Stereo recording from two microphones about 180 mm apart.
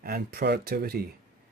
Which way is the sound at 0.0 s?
60° right (ahead or behind).